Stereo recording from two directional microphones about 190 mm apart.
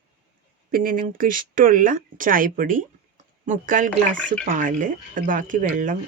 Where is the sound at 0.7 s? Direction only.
45° right (ahead or behind).